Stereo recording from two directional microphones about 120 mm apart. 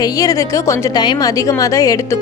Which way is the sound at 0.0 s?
30° left (ahead or behind).